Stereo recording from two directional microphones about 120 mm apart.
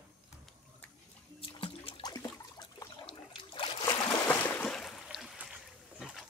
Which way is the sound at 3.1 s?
50° left (ahead or behind).